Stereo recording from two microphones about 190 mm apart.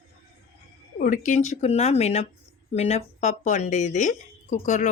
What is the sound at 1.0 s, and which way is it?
Speech, 45° left (ahead or behind).